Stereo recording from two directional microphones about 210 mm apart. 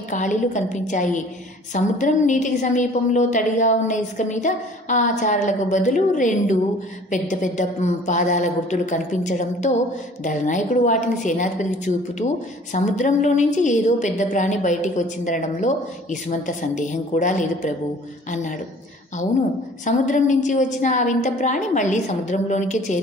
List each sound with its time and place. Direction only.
0.1 s a woman's voice: 35° left (ahead or behind)
19.8 s a woman's voice: 35° left (ahead or behind)